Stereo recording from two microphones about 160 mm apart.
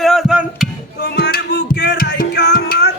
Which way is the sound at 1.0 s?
75° left (ahead or behind).